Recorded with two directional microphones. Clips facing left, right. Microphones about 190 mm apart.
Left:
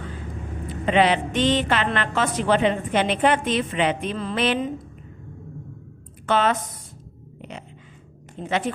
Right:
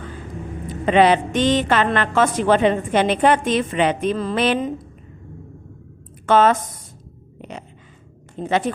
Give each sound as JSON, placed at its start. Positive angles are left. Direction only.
{"t": 0.9, "sound": "a woman's voice", "side_deg": -45}
{"t": 6.2, "sound": "speech", "side_deg": -45}
{"t": 8.4, "sound": "a woman's voice", "side_deg": -40}